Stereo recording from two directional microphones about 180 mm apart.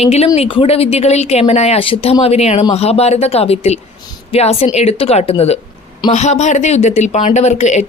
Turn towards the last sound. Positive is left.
turn(degrees=40)  # may be behind; listen again after turning